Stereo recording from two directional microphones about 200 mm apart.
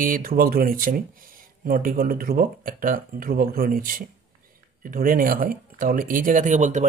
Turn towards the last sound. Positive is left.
turn(degrees=-40)  # may be behind; listen again after turning